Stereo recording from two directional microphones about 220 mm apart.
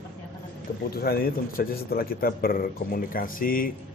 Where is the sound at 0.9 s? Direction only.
45° left (ahead or behind).